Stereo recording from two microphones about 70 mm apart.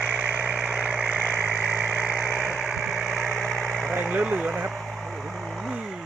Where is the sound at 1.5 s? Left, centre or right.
Right.